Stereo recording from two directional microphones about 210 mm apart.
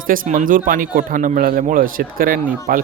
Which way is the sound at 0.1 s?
40° right (ahead or behind).